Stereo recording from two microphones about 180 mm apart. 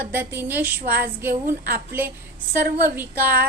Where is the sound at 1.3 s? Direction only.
55° right (ahead or behind).